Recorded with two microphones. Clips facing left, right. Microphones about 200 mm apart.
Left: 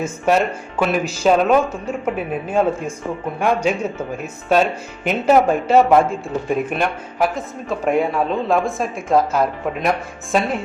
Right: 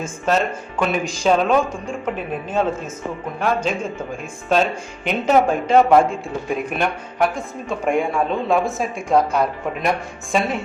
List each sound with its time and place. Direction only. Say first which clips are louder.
0.0 s speech: left 3 dB; 10° left (ahead or behind)